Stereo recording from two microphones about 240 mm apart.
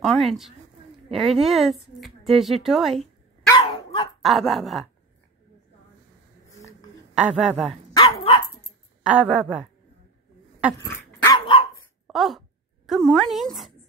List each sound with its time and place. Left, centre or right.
0.0 s a woman's voice: centre
3.4 s dog: left
4.2 s a woman's voice: centre
7.2 s a woman's voice: centre
7.9 s dog: left
9.0 s a woman's voice: centre
11.2 s dog: centre
12.1 s speech: centre